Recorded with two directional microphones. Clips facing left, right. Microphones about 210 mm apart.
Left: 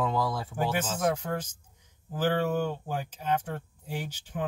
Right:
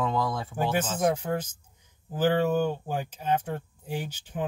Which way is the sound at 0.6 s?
20° right (ahead or behind).